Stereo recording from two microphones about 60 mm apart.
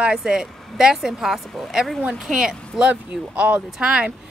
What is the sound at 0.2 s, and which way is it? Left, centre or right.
A woman's voice, centre.